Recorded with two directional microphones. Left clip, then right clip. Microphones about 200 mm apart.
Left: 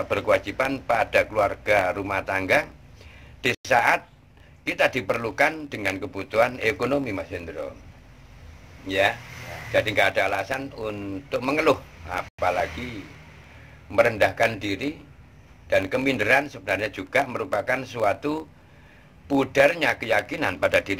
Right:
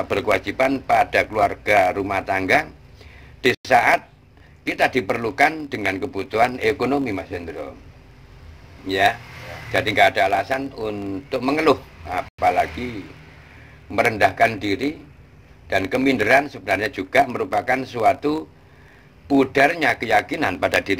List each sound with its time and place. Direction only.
0.1 s a man's voice: 20° right (ahead or behind)
8.8 s a man's voice: 15° right (ahead or behind)
13.9 s a man's voice: 15° right (ahead or behind)